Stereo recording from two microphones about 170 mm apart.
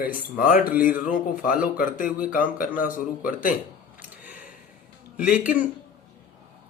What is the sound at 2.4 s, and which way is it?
Speech, 55° left (ahead or behind).